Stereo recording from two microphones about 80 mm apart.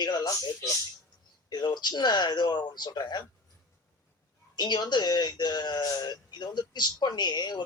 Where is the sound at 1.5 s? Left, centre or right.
Left.